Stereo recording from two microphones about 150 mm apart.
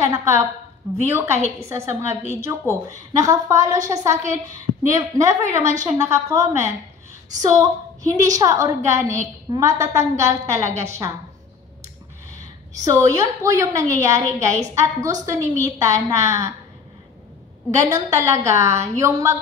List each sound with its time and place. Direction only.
0.0 s a woman's voice: 20° right (ahead or behind)
5.6 s a woman's voice: 55° right (ahead or behind)
6.0 s a woman's voice: 20° right (ahead or behind)
12.7 s a woman's voice: 20° right (ahead or behind)
17.6 s a woman's voice: 20° right (ahead or behind)